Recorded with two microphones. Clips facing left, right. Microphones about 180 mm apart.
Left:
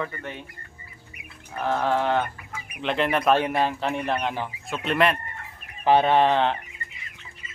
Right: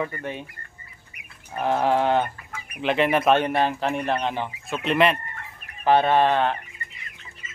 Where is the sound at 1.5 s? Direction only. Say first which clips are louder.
Right 2 dB; 15° right (ahead or behind).